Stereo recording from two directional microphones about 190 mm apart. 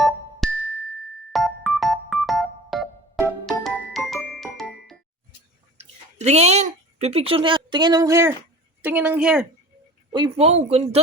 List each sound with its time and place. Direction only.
0.0 s music: centre (ahead or behind)
1.3 s electric piano: centre (ahead or behind)
5.7 s speech: 35° right (ahead or behind); by 9.5 s 5° right (ahead or behind)
10.1 s speech: 25° right (ahead or behind)